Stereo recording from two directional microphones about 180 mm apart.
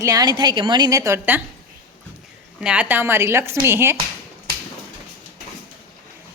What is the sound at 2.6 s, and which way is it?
A woman's voice, 5° right (ahead or behind).